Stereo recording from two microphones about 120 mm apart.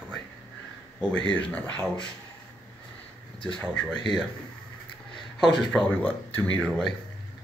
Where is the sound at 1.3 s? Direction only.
10° left (ahead or behind).